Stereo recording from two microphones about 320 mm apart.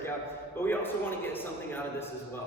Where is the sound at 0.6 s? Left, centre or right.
Centre.